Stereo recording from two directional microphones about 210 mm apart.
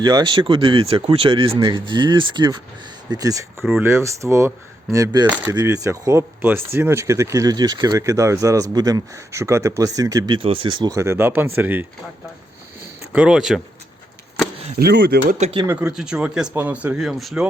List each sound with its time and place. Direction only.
0.0 s speech: 20° right (ahead or behind)
3.6 s speech: centre (ahead or behind)
3.8 s speech: 15° right (ahead or behind)
12.8 s a sound: 10° right (ahead or behind)
14.8 s speech: 50° right (ahead or behind)
15.4 s speech: 30° right (ahead or behind)
15.6 s speech: 10° right (ahead or behind)